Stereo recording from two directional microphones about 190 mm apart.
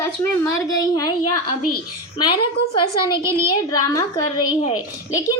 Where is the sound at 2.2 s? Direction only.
25° left (ahead or behind).